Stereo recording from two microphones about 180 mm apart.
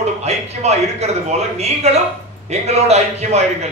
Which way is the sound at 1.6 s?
35° right (ahead or behind).